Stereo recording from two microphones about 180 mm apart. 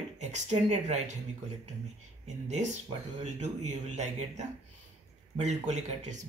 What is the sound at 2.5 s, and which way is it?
Speech, 40° right (ahead or behind).